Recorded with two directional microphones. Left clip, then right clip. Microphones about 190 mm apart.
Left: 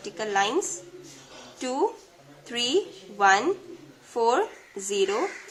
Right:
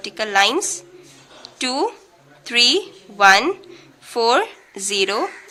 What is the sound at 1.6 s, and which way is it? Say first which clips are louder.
A woman's voice: right 5 dB; 30° right (ahead or behind).